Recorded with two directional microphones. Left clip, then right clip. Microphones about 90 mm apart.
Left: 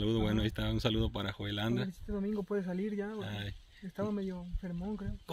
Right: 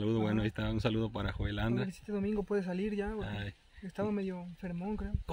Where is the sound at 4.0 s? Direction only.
15° right (ahead or behind).